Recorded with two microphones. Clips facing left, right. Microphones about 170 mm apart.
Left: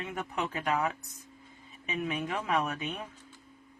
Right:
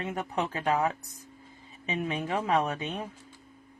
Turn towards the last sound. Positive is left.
turn(degrees=-30)  # may be behind; listen again after turning